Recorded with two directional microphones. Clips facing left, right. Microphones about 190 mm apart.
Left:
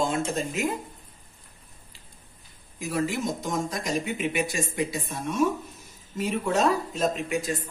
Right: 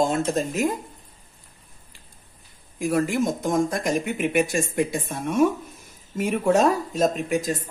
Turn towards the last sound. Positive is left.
turn(degrees=-40)  # may be behind; listen again after turning